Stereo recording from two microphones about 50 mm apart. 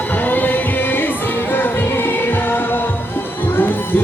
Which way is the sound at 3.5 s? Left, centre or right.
Left.